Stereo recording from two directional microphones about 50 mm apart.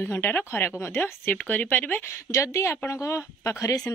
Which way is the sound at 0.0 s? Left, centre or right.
Left.